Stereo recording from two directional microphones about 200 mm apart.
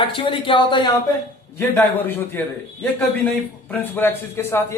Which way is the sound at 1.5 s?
10° left (ahead or behind).